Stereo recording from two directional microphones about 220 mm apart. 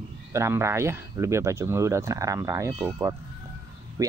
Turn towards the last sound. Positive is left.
turn(degrees=-15)  # may be behind; listen again after turning